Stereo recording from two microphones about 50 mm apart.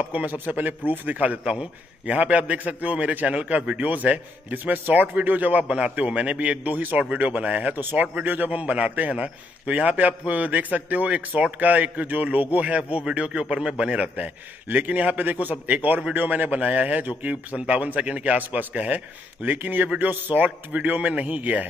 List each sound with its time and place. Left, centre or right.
0.0 s a man's voice: right
7.8 s a man's voice: right